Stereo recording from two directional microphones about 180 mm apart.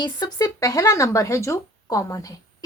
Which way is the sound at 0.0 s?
20° left (ahead or behind).